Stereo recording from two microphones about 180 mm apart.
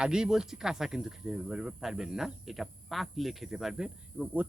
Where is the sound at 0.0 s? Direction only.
5° right (ahead or behind).